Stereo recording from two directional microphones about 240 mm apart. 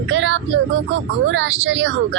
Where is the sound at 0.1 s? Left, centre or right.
Right.